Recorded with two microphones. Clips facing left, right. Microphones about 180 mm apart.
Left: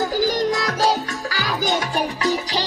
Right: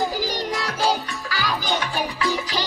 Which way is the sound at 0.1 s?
45° left (ahead or behind).